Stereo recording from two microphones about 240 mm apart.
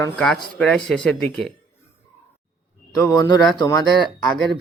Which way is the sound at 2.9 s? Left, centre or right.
Centre.